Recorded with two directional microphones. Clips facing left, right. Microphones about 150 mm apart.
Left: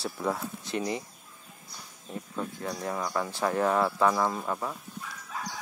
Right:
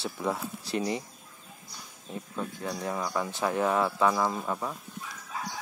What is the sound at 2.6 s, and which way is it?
Speech, 10° right (ahead or behind).